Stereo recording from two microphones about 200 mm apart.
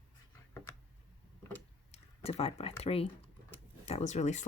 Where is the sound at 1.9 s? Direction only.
30° left (ahead or behind).